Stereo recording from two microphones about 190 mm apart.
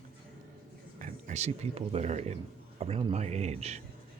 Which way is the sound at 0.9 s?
40° right (ahead or behind).